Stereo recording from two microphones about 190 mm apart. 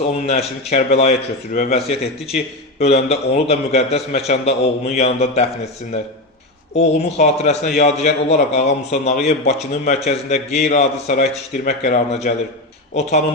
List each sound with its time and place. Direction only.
0.7 s a man's voice: 35° left (ahead or behind)
6.7 s a man's voice: 40° left (ahead or behind)